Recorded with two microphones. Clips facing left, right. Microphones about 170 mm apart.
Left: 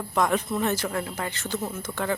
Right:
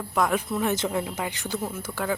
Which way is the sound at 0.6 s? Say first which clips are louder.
Right 1 dB; 15° right (ahead or behind).